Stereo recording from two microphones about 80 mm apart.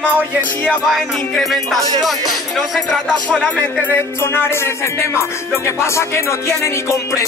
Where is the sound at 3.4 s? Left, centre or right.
Centre.